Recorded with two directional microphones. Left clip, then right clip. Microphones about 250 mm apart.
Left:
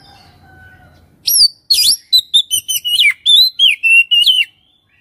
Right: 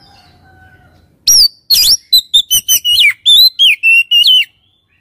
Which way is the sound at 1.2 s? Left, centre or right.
Centre.